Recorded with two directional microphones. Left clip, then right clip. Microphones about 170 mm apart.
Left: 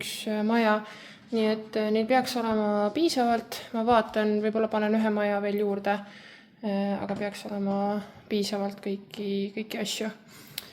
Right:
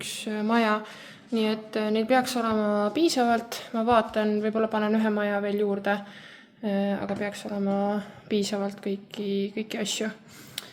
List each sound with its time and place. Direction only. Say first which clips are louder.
0.0 s speech: left 1 dB; 5° left (ahead or behind)